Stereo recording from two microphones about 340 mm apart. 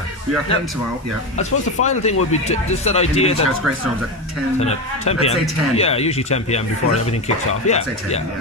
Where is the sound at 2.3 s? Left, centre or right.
Centre.